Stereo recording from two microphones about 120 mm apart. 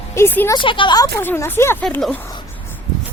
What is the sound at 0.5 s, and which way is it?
Speech, 45° left (ahead or behind).